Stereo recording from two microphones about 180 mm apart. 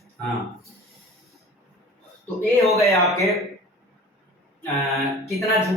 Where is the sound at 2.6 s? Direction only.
15° left (ahead or behind).